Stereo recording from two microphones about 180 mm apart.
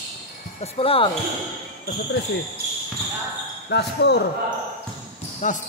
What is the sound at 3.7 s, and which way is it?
Speech, 70° left (ahead or behind).